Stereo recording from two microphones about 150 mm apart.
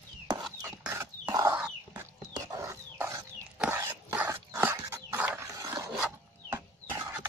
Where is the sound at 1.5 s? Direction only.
10° right (ahead or behind).